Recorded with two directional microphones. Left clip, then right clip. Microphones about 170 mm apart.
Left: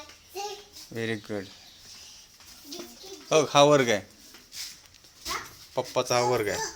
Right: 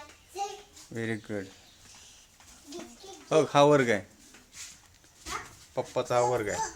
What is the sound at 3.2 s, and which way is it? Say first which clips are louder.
Speech: left 2 dB; 20° right (ahead or behind).